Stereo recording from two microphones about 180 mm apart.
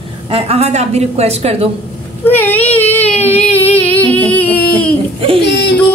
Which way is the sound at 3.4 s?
10° left (ahead or behind).